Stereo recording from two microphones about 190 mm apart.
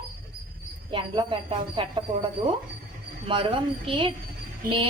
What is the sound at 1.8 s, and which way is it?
Speech, 25° right (ahead or behind).